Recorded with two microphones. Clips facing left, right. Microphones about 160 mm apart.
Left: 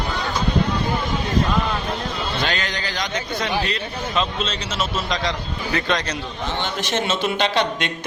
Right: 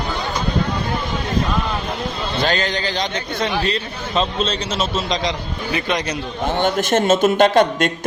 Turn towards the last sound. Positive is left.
turn(degrees=-45)  # may be behind; listen again after turning